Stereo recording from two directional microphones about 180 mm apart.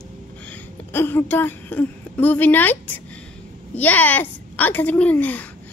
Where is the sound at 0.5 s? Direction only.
10° left (ahead or behind).